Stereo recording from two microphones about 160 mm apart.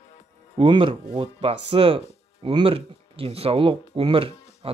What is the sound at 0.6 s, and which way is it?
Speech, 30° right (ahead or behind).